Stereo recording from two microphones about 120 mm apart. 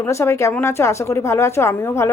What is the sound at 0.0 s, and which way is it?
Speech, 25° left (ahead or behind).